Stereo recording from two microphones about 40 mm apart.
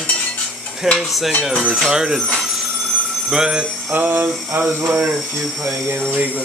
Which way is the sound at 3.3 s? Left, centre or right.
Centre.